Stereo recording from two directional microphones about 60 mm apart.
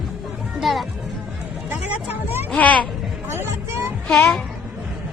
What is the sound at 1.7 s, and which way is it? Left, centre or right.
Music, right.